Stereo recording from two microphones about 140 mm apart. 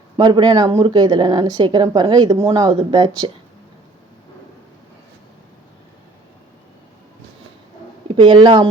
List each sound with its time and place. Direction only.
0.2 s speech: 30° right (ahead or behind)
2.4 s speech: 25° right (ahead or behind)
8.0 s speech: 35° right (ahead or behind)